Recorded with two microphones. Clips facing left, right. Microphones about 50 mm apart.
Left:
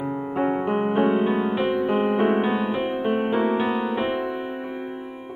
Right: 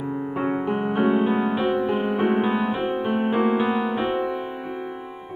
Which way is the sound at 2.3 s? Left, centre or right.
Centre.